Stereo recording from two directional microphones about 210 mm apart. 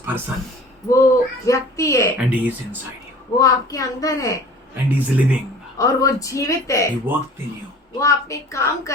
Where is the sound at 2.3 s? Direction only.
10° right (ahead or behind).